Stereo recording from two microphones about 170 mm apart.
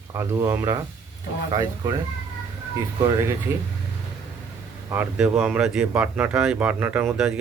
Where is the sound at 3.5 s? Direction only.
15° right (ahead or behind).